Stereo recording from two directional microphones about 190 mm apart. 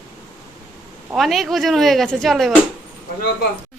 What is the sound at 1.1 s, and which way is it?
A woman's voice, centre (ahead or behind).